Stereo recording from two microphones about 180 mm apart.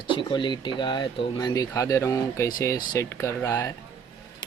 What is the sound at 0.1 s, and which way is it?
Speech, 25° left (ahead or behind).